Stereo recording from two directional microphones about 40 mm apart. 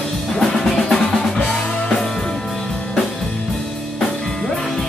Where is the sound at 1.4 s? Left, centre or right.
Centre.